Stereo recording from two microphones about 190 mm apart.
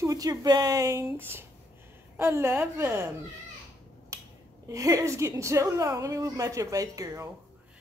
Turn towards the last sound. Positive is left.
turn(degrees=-15)  # may be behind; listen again after turning